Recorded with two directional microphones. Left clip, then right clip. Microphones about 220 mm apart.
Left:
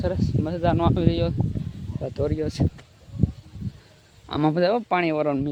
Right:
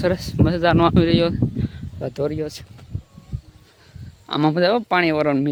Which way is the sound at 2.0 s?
10° right (ahead or behind).